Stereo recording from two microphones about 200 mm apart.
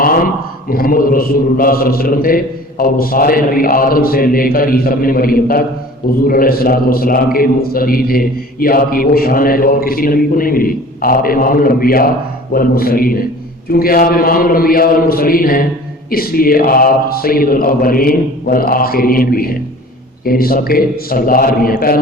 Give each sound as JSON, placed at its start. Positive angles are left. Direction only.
{"t": 0.7, "sound": "a man's voice", "side_deg": 45}